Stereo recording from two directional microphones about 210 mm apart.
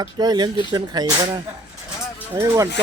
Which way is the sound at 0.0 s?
20° right (ahead or behind).